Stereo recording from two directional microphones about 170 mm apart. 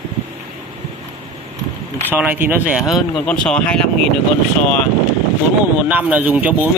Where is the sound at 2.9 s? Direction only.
5° left (ahead or behind).